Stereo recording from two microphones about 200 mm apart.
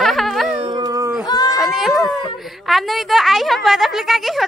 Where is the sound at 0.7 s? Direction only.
20° right (ahead or behind).